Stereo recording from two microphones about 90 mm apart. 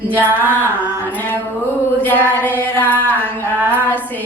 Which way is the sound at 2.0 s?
20° left (ahead or behind).